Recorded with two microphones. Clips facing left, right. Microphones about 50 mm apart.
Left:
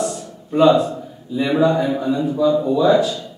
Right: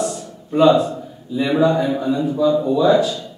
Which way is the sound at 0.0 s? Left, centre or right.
Centre.